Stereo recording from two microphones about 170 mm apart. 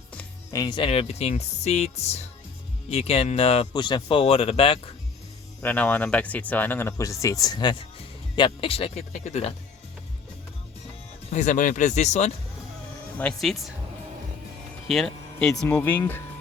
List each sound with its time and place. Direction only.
0.5 s speech: 25° left (ahead or behind)
5.6 s speech: 10° left (ahead or behind); by 9.6 s 40° left (ahead or behind)
11.3 s speech: 45° left (ahead or behind)
13.1 s speech: 5° left (ahead or behind)
14.8 s speech: centre (ahead or behind)